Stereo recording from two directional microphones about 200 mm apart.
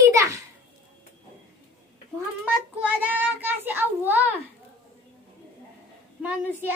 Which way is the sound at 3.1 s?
10° right (ahead or behind).